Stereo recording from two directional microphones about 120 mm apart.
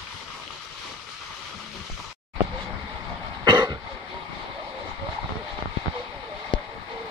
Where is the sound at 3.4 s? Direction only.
35° right (ahead or behind).